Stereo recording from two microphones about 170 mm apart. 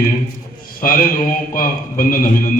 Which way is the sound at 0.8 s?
55° left (ahead or behind).